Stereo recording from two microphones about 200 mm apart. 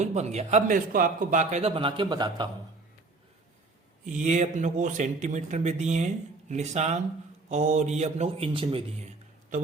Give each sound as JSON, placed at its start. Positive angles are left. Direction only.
{"t": 0.0, "sound": "speech", "side_deg": -35}
{"t": 4.0, "sound": "speech", "side_deg": -40}